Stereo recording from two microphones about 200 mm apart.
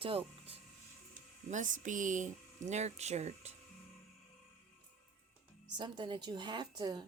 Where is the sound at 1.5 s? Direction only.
40° right (ahead or behind).